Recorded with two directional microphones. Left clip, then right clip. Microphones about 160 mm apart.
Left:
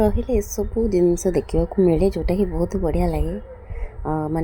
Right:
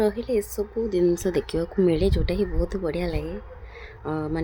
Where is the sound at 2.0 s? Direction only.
15° left (ahead or behind).